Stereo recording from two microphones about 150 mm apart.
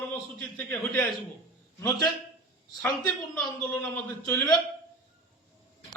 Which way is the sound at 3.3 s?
10° left (ahead or behind).